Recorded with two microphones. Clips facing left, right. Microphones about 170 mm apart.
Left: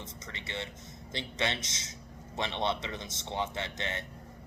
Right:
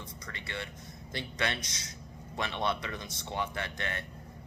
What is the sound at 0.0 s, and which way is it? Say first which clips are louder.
Speech: even; 20° left (ahead or behind).